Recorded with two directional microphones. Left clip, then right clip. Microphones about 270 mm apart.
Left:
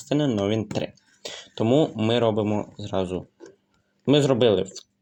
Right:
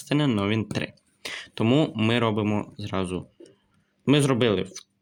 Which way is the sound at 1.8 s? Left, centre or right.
Right.